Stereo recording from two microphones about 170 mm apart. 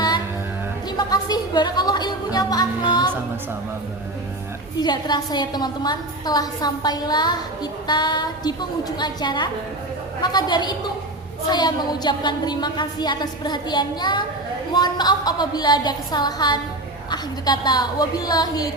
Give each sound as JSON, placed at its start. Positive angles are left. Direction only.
{"t": 0.9, "sound": "a woman's voice", "side_deg": 25}
{"t": 4.8, "sound": "a woman's voice", "side_deg": 25}